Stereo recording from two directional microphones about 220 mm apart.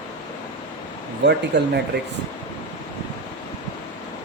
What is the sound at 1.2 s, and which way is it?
Speech, 50° right (ahead or behind).